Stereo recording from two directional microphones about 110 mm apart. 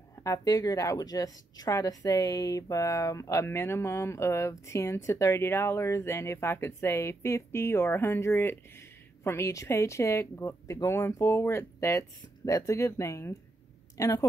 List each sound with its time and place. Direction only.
0.2 s a woman's voice: 30° left (ahead or behind)